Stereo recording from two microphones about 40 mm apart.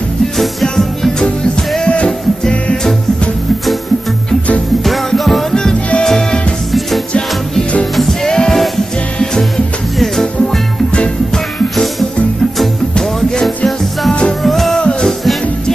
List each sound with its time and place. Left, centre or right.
1.9 s music: left
4.8 s music: centre
7.9 s music: centre
14.4 s music: centre
14.8 s music: left